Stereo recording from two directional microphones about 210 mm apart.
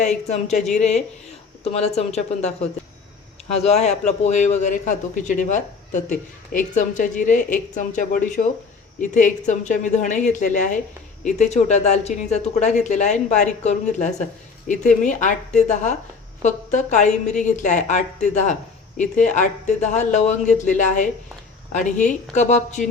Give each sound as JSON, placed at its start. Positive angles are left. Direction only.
{"t": 0.3, "sound": "a man's voice", "side_deg": 30}